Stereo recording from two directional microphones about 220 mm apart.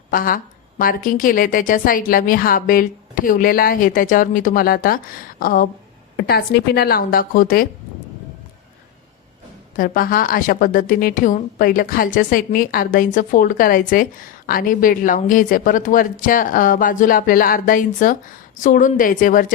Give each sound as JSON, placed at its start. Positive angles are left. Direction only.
{"t": 0.1, "sound": "a woman's voice", "side_deg": 40}
{"t": 9.7, "sound": "a woman's voice", "side_deg": 40}